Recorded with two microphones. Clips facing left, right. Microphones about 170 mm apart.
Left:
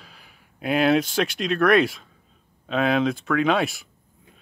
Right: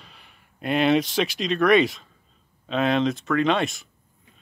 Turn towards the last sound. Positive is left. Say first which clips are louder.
# left 1 dB
turn(degrees=5)  # may be behind; listen again after turning